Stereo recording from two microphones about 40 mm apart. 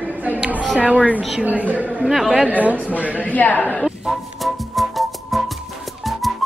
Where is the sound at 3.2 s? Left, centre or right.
Left.